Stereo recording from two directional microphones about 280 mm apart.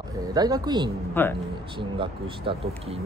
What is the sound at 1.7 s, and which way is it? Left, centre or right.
A man's voice, centre.